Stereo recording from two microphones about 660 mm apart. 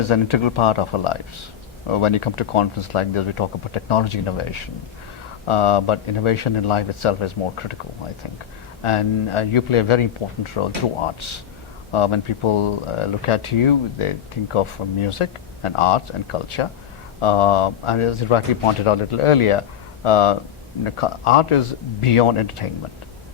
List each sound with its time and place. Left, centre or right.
0.0 s speech: left
8.8 s speech: left